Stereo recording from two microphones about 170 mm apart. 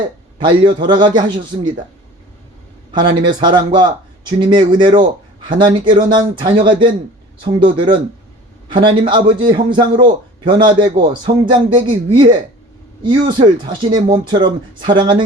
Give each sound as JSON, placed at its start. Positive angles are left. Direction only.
{"t": 0.3, "sound": "a man's voice", "side_deg": -30}
{"t": 2.9, "sound": "a man's voice", "side_deg": -25}